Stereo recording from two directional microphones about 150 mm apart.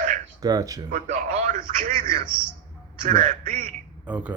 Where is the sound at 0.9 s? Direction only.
60° right (ahead or behind).